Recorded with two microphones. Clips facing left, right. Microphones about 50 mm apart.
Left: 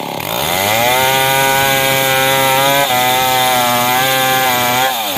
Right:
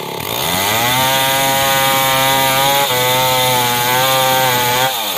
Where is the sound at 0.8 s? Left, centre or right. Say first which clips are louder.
Left 3 dB; left.